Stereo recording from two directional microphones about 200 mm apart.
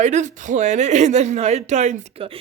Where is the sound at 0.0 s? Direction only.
35° right (ahead or behind).